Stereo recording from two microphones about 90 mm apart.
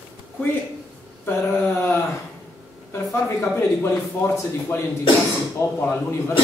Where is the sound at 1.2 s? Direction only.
25° left (ahead or behind).